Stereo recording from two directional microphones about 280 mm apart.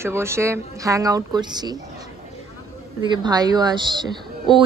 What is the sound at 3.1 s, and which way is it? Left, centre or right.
Speech, centre.